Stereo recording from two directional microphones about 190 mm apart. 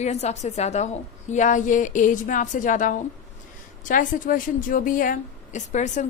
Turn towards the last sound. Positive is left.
turn(degrees=40)  # may be behind; listen again after turning